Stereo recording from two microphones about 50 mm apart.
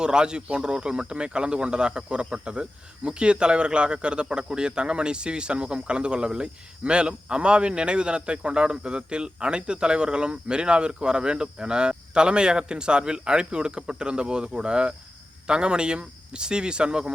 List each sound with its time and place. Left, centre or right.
0.0 s speech: centre